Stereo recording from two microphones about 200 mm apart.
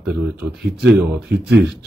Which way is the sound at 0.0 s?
5° right (ahead or behind).